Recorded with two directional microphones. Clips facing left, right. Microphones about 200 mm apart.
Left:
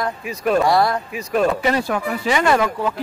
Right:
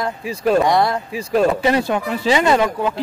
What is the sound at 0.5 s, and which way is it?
Speech, 20° right (ahead or behind).